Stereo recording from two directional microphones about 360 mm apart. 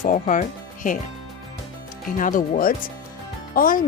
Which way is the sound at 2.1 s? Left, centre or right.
Left.